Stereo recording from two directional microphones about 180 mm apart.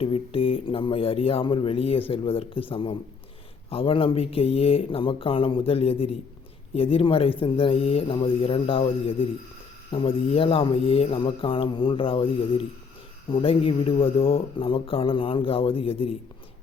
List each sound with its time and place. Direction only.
0.0 s speech: 30° left (ahead or behind)